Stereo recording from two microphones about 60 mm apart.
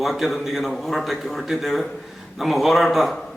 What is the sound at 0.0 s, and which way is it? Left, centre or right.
A man's voice, centre.